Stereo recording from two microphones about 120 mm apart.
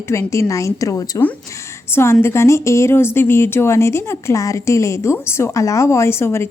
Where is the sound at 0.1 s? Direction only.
25° left (ahead or behind).